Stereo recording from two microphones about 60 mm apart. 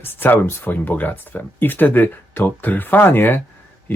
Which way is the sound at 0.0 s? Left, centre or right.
Left.